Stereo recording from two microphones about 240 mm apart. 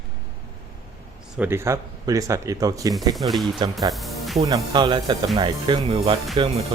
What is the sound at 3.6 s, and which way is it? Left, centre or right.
Speech, centre.